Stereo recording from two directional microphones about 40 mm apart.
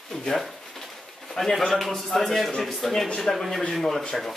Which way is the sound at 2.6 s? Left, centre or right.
Centre.